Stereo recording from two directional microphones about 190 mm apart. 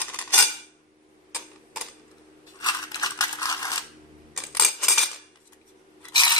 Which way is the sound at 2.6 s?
20° left (ahead or behind).